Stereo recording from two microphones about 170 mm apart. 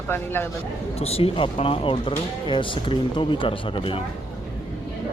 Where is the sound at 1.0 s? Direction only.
35° left (ahead or behind).